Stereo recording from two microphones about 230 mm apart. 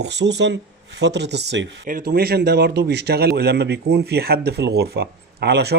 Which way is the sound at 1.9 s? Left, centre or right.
Right.